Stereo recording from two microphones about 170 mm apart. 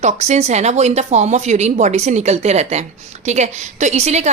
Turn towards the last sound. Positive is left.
turn(degrees=-40)  # may be behind; listen again after turning